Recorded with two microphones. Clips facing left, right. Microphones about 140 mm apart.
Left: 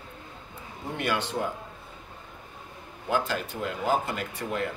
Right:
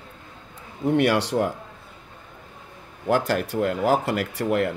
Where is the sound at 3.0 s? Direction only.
75° right (ahead or behind).